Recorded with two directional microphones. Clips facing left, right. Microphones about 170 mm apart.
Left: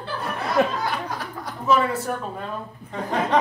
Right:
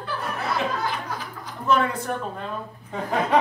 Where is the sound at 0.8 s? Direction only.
65° left (ahead or behind).